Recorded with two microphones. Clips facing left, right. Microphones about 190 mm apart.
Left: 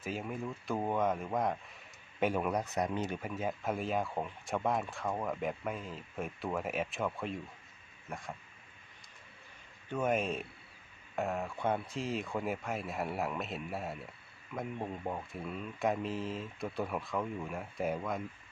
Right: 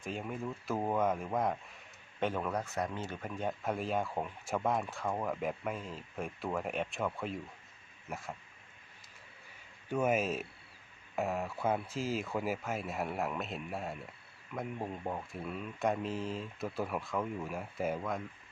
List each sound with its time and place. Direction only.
0.0 s speech: centre (ahead or behind)
2.2 s speech: 10° left (ahead or behind)
3.2 s speech: 5° left (ahead or behind)
9.9 s speech: 5° right (ahead or behind)